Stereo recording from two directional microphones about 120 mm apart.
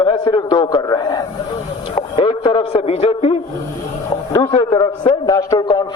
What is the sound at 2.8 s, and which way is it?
Speech, 55° left (ahead or behind).